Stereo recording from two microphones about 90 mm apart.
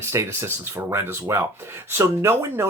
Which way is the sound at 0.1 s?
30° right (ahead or behind).